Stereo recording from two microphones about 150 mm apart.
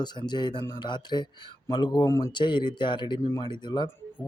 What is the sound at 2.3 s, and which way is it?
Speech, 30° left (ahead or behind).